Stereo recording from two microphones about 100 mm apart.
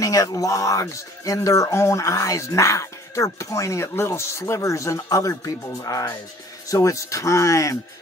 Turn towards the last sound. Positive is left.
turn(degrees=30)  # may be behind; listen again after turning